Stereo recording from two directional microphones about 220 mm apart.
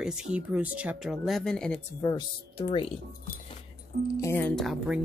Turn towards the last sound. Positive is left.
turn(degrees=0)  # may be behind; listen again after turning